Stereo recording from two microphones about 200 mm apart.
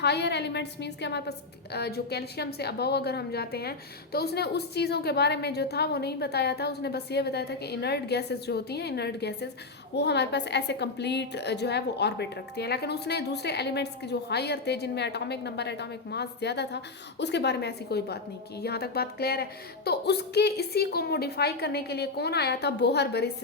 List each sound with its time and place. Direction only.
0.0 s a woman's voice: 55° left (ahead or behind)